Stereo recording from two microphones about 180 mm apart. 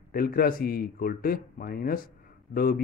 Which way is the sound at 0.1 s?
55° left (ahead or behind).